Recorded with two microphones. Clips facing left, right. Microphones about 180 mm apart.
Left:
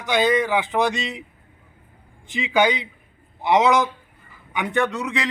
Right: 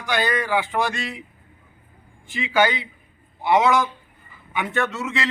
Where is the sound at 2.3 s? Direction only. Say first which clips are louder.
Left 1 dB; 20° left (ahead or behind).